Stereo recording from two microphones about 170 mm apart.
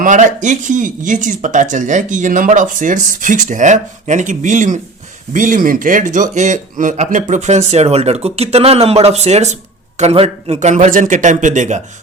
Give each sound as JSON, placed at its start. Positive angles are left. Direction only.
{"t": 0.0, "sound": "a man's voice", "side_deg": -45}